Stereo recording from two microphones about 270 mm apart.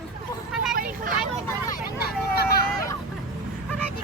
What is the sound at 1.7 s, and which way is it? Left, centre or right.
Vehicle, left.